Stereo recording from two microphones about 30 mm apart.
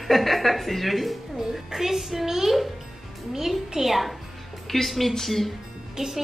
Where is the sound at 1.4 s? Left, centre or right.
Centre.